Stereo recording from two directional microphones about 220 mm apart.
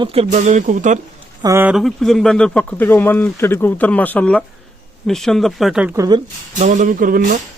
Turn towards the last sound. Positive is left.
turn(degrees=-35)  # may be behind; listen again after turning